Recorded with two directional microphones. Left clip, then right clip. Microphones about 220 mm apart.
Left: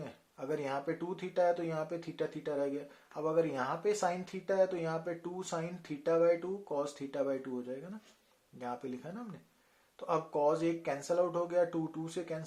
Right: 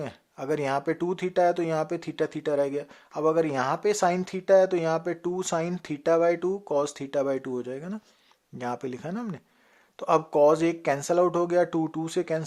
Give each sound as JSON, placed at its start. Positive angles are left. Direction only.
{"t": 0.0, "sound": "speech", "side_deg": -40}